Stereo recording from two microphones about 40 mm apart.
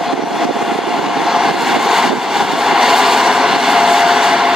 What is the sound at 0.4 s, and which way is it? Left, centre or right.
Vehicle, centre.